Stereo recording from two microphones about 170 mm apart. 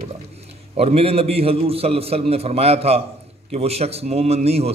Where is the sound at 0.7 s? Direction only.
35° right (ahead or behind).